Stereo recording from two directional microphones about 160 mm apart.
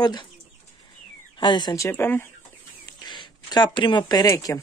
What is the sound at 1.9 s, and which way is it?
Speech, 15° left (ahead or behind).